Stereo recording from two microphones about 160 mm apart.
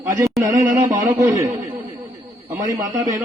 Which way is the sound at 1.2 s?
20° right (ahead or behind).